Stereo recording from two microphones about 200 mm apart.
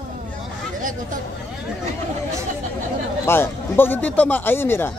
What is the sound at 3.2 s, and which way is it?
A man's voice, 10° left (ahead or behind).